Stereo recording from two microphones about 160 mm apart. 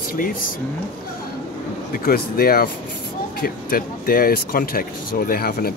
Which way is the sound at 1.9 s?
65° left (ahead or behind).